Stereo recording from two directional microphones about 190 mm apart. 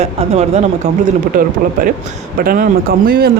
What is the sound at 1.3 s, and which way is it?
Speech, 50° right (ahead or behind).